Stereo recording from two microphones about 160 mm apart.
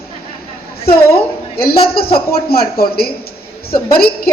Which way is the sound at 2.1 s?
70° left (ahead or behind).